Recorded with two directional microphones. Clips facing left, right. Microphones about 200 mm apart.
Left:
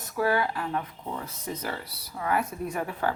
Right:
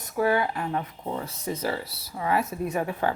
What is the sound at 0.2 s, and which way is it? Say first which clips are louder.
Speech: right 2 dB; 20° right (ahead or behind).